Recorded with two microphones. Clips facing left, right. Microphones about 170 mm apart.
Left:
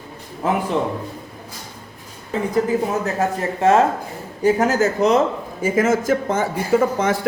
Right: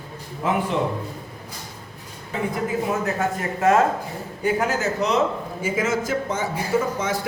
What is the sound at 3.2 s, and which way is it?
Speech, 30° left (ahead or behind).